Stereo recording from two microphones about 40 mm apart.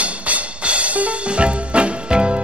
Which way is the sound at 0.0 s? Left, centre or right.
Right.